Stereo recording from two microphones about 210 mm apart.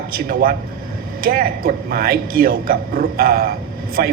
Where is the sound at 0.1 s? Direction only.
45° right (ahead or behind).